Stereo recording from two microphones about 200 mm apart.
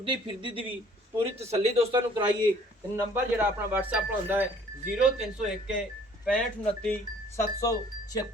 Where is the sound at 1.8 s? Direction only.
25° right (ahead or behind).